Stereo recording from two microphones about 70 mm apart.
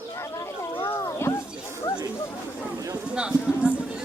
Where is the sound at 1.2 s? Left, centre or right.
Left.